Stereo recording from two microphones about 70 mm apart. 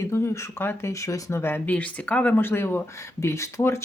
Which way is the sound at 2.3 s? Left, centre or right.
Left.